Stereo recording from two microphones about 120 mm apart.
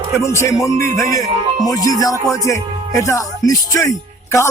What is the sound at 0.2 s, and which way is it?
Speech, 25° left (ahead or behind).